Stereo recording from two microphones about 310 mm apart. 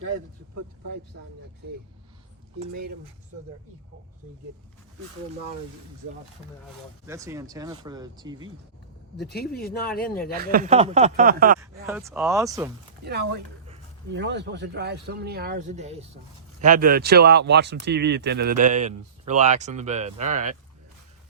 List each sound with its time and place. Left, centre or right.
7.0 s speech: centre
9.1 s speech: left
10.3 s speech: right
11.9 s speech: centre
13.1 s speech: right